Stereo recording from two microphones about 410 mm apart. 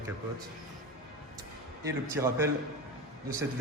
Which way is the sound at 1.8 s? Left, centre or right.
Centre.